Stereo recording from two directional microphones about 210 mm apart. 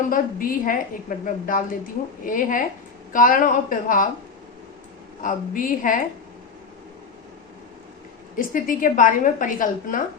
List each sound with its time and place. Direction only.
0.1 s a woman's voice: 40° left (ahead or behind)
5.2 s a woman's voice: 40° left (ahead or behind)
8.4 s a woman's voice: 40° left (ahead or behind)